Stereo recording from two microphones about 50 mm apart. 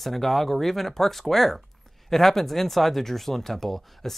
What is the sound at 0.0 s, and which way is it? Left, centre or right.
Speech, centre.